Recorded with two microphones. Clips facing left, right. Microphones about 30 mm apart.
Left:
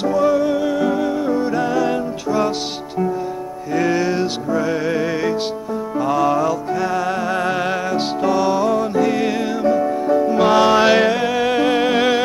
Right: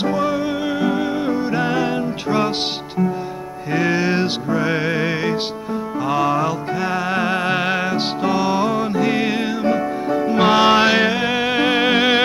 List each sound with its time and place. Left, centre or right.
0.0 s music: right
3.7 s music: right
5.9 s music: centre